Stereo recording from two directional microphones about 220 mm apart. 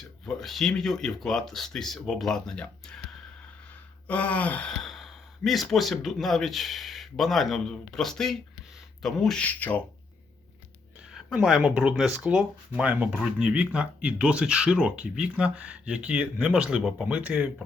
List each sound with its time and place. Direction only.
0.0 s speech: centre (ahead or behind)
4.0 s speech: 5° left (ahead or behind)
11.1 s speech: centre (ahead or behind)